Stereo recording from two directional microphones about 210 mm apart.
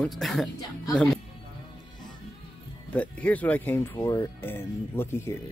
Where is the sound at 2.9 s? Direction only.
5° left (ahead or behind).